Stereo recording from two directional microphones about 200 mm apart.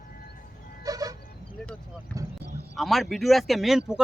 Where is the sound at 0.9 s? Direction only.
20° right (ahead or behind).